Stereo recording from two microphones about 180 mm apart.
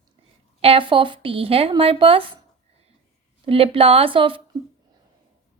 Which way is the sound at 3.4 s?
30° right (ahead or behind).